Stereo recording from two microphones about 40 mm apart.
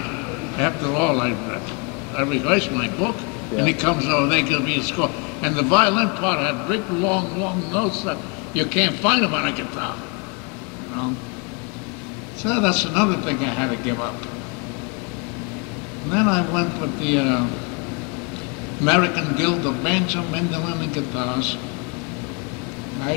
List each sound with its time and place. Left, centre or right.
0.0 s a man's voice: centre
12.4 s a man's voice: centre
16.1 s a man's voice: centre
18.9 s a man's voice: centre